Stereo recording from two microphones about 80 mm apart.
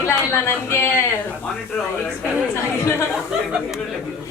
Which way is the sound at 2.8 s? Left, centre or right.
Left.